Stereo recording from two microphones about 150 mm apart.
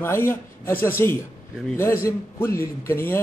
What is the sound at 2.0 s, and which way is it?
A man's voice, 20° left (ahead or behind).